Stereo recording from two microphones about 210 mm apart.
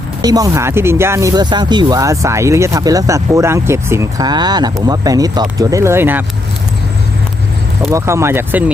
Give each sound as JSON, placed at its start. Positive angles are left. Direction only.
{"t": 0.2, "sound": "speech", "side_deg": -15}
{"t": 7.9, "sound": "speech", "side_deg": -15}